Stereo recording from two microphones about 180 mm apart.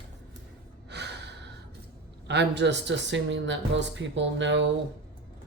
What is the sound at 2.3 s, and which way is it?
Speech, 70° right (ahead or behind).